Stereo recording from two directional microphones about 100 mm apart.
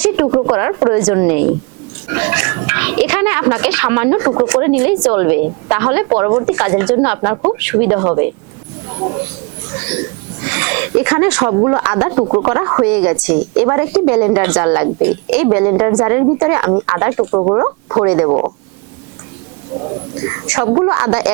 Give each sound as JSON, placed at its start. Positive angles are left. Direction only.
{"t": 0.0, "sound": "a woman's voice", "side_deg": -20}
{"t": 10.4, "sound": "speech", "side_deg": -20}
{"t": 20.2, "sound": "speech", "side_deg": -20}